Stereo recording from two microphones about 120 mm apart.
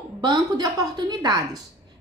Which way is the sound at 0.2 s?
35° right (ahead or behind).